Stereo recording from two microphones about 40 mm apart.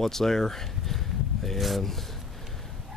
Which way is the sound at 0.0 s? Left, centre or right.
Centre.